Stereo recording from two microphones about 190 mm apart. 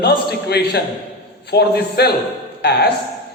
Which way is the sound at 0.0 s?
60° left (ahead or behind).